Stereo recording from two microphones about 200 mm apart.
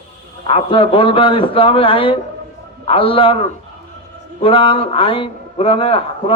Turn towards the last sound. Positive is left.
turn(degrees=25)  # may be behind; listen again after turning